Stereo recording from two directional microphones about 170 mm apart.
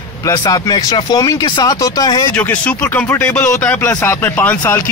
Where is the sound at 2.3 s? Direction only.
10° left (ahead or behind).